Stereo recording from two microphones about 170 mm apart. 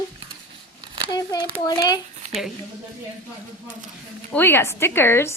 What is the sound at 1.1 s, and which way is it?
Speech, 20° left (ahead or behind).